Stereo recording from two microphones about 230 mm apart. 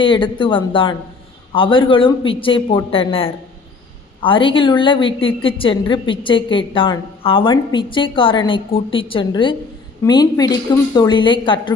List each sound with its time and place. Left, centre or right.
0.0 s a woman's voice: left